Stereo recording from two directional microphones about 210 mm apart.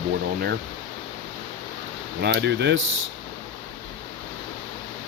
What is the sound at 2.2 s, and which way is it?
Speech, 55° right (ahead or behind).